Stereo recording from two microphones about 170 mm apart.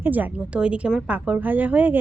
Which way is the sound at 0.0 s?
10° right (ahead or behind).